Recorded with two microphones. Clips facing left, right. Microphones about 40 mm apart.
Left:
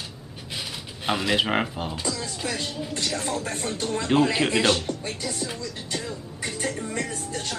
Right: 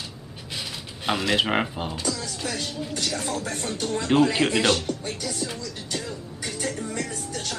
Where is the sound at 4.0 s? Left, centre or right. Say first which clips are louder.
Right 1 dB; centre.